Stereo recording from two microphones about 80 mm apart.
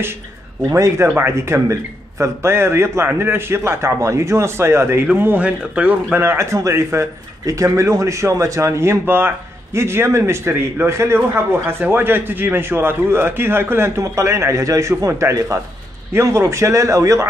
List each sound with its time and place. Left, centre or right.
0.7 s a man's voice: right
5.0 s speech: right
6.1 s a man's voice: right